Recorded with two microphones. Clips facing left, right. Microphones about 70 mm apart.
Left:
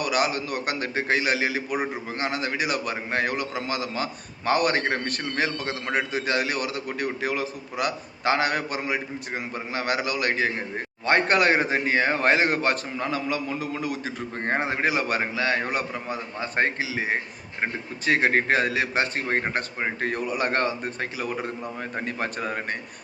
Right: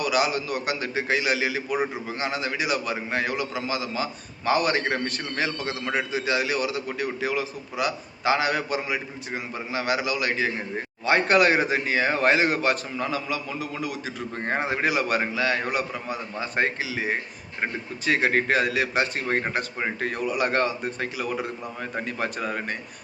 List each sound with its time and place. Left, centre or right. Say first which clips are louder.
0.0 s a man's voice: right 1 dB; left